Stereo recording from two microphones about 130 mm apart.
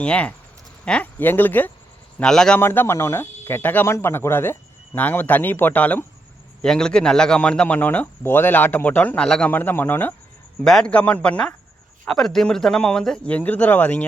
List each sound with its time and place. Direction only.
0.0 s speech: 10° left (ahead or behind)
2.6 s speech: 15° left (ahead or behind)
10.6 s speech: 5° left (ahead or behind)